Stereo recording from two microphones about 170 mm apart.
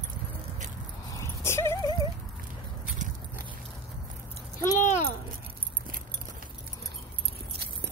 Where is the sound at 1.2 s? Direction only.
15° left (ahead or behind).